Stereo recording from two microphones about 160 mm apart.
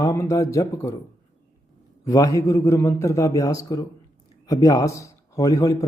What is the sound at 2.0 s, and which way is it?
Speech, 20° left (ahead or behind).